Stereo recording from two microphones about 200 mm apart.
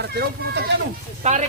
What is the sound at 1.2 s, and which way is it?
Speech, 35° right (ahead or behind).